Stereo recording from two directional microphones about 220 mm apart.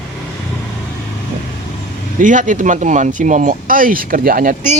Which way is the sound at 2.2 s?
35° right (ahead or behind).